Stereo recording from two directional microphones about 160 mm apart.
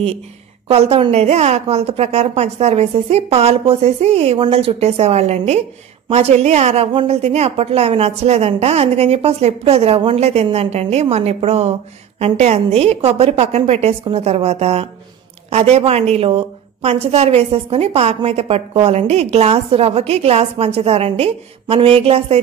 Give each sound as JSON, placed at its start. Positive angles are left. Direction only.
{"t": 0.7, "sound": "a woman's voice", "side_deg": -35}